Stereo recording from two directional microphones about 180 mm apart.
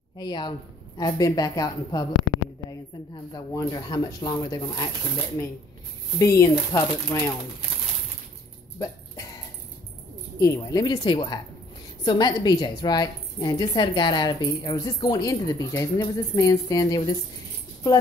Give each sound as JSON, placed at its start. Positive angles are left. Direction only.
{"t": 0.2, "sound": "a woman's voice", "side_deg": 25}
{"t": 3.5, "sound": "a woman's voice", "side_deg": 20}
{"t": 6.1, "sound": "speech", "side_deg": 15}
{"t": 8.7, "sound": "music", "side_deg": 20}
{"t": 10.4, "sound": "a woman's voice", "side_deg": 15}